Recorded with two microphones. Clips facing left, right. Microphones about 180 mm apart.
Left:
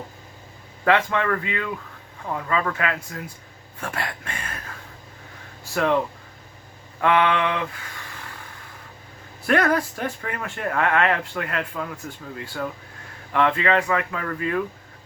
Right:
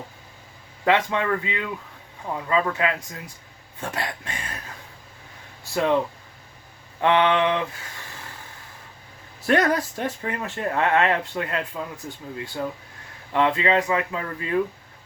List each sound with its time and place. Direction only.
0.9 s speech: 20° right (ahead or behind)
5.7 s speech: 20° right (ahead or behind)
7.0 s speech: 25° right (ahead or behind)
9.5 s speech: 20° right (ahead or behind)